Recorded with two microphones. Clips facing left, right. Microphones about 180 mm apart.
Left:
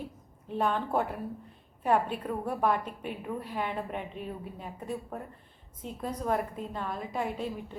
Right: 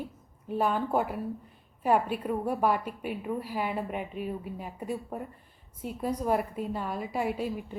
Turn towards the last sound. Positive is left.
turn(degrees=-10)  # may be behind; listen again after turning